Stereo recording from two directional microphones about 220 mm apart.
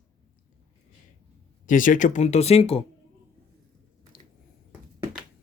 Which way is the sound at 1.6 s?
35° left (ahead or behind).